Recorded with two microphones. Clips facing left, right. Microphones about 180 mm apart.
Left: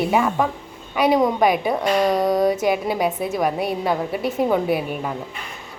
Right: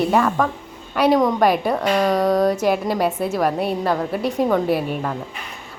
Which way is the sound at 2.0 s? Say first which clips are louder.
Right 1 dB; 20° left (ahead or behind).